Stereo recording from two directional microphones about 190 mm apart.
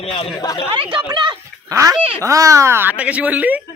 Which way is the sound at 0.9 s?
25° right (ahead or behind).